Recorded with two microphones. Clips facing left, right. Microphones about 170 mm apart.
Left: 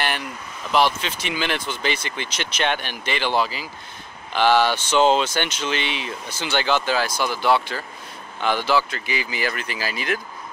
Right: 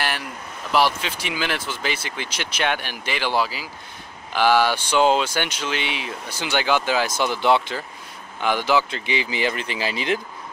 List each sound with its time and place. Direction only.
0.7 s speech: 10° right (ahead or behind)